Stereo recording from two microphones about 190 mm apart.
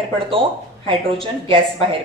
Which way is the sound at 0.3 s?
25° right (ahead or behind).